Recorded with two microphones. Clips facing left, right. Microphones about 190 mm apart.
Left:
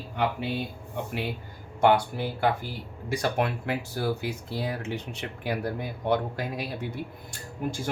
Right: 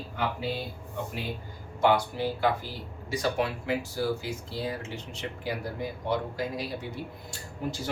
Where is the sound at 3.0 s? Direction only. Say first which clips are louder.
Left 1 dB; 55° left (ahead or behind).